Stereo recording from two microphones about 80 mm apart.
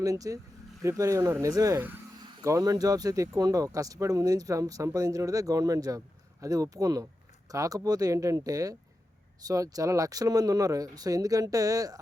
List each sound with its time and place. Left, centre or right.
0.0 s speech: right